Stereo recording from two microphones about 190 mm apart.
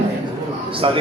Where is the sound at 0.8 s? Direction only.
30° right (ahead or behind).